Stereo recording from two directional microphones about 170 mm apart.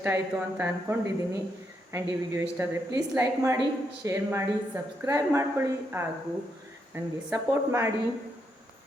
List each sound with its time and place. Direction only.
0.0 s a woman's voice: 10° right (ahead or behind)